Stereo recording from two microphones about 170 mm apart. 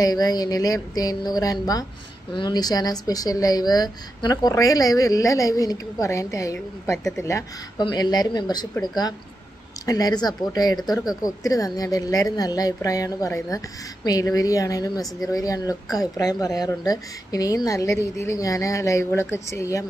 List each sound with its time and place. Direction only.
0.0 s speech: 25° left (ahead or behind)